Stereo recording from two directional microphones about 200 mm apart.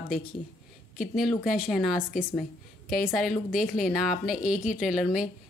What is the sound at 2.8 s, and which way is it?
Speech, 50° left (ahead or behind).